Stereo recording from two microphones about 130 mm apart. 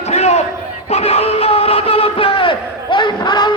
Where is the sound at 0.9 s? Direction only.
50° left (ahead or behind).